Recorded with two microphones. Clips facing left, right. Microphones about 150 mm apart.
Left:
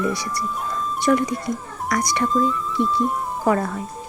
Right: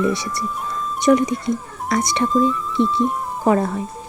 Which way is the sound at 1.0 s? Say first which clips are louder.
Right 4 dB; 20° right (ahead or behind).